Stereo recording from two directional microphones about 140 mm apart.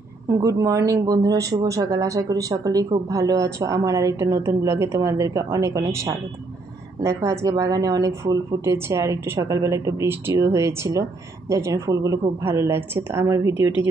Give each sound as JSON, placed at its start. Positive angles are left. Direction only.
{"t": 0.3, "sound": "a woman's voice", "side_deg": -25}